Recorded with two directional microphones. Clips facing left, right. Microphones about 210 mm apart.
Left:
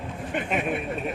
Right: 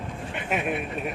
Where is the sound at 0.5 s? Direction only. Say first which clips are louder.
Even; 5° right (ahead or behind).